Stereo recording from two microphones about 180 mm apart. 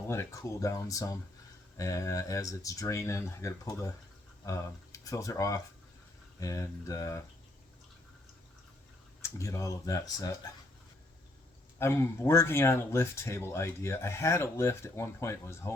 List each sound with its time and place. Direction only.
0.1 s speech: 15° left (ahead or behind)
9.2 s speech: 15° left (ahead or behind)
11.8 s speech: 15° left (ahead or behind)